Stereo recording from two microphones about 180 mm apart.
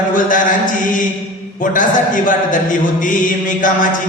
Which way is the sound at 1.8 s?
45° left (ahead or behind).